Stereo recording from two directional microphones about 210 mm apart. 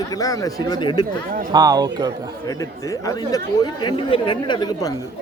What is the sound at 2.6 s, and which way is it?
Speech, 15° left (ahead or behind).